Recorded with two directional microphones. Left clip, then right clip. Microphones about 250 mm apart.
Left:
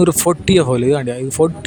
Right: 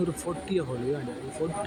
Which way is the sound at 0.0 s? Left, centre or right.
Left.